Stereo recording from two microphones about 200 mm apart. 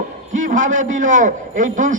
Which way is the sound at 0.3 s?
40° right (ahead or behind).